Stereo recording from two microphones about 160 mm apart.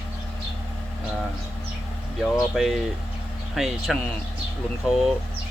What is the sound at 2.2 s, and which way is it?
Speech, centre (ahead or behind).